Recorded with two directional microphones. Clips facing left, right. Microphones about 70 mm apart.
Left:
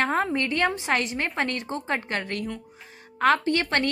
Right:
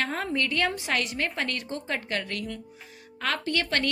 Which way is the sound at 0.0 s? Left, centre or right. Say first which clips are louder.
Left 4 dB; left.